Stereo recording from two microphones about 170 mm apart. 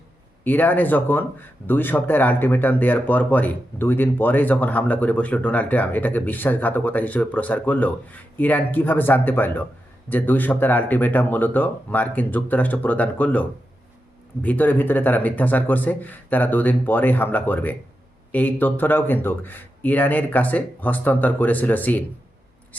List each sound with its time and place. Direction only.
0.4 s speech: 10° left (ahead or behind)